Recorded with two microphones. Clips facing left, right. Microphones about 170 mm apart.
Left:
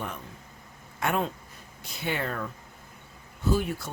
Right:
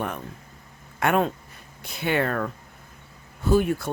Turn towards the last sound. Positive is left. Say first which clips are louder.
# right 6 dB
turn(degrees=-55)  # may be behind; listen again after turning